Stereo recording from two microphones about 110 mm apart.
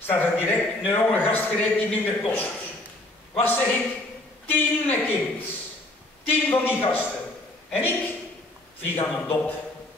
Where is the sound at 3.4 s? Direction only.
15° left (ahead or behind).